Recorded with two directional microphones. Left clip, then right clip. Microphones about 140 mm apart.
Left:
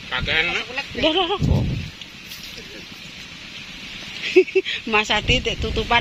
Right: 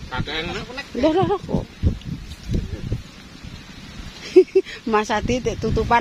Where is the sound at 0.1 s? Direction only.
50° right (ahead or behind).